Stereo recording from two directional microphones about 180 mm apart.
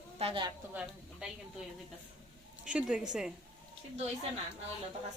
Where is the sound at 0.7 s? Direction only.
10° right (ahead or behind).